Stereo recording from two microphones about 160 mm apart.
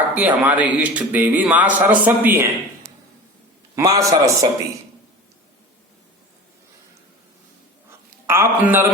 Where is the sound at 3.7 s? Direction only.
20° right (ahead or behind).